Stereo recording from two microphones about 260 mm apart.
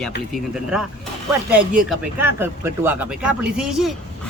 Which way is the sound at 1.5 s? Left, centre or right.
Centre.